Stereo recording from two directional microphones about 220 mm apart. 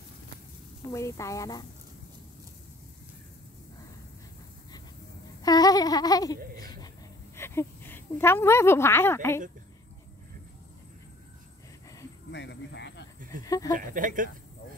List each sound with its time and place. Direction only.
0.9 s speech: 15° left (ahead or behind)
5.4 s a sound: 15° left (ahead or behind)
7.3 s a woman's voice: 10° left (ahead or behind)
12.3 s cricket: 55° left (ahead or behind)
13.7 s speech: 35° right (ahead or behind)